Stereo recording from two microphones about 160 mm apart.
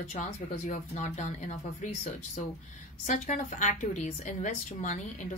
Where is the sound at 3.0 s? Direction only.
55° left (ahead or behind).